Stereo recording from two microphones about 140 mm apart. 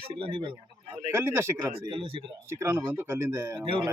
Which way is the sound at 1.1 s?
15° right (ahead or behind).